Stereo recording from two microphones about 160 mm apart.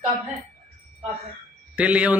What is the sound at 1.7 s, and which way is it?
Speech, 10° right (ahead or behind).